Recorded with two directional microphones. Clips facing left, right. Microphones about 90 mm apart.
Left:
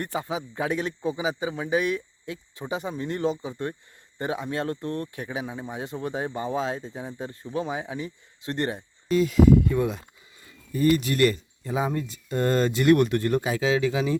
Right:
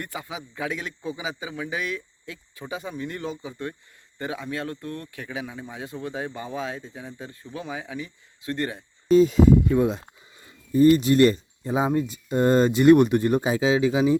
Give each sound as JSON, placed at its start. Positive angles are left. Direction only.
{"t": 0.0, "sound": "speech", "side_deg": 30}
{"t": 9.0, "sound": "speech", "side_deg": -25}